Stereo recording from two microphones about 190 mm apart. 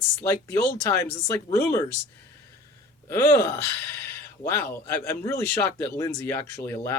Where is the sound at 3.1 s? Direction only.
15° left (ahead or behind).